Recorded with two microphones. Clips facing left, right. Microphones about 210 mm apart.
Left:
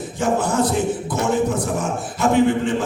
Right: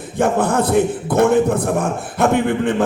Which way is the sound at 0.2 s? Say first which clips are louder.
Right 3 dB; 60° right (ahead or behind).